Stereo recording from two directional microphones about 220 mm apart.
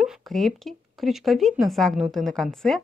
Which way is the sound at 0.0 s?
Centre (ahead or behind).